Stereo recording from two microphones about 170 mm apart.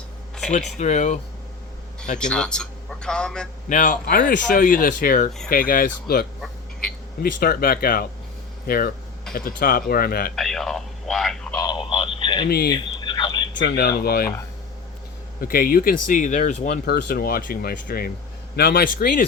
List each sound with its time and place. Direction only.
0.5 s speech: 45° left (ahead or behind)
2.1 s a man's voice: 5° left (ahead or behind)
3.7 s speech: 50° left (ahead or behind)
10.3 s speech: centre (ahead or behind)
11.5 s radio: 25° left (ahead or behind)
12.5 s speech: 70° left (ahead or behind)
12.7 s fowl: 25° left (ahead or behind)
13.6 s speech: 70° left (ahead or behind)
15.4 s speech: 55° left (ahead or behind)
16.8 s speech: 65° left (ahead or behind)